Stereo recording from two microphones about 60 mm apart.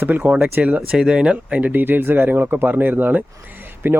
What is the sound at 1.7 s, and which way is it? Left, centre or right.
Speech, right.